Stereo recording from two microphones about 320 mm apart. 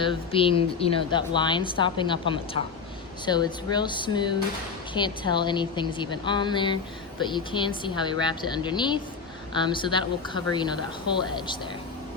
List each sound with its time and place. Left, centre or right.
0.0 s speech: centre